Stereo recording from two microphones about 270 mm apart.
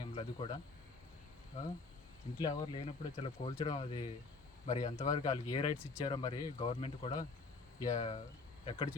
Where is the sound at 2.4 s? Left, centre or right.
Centre.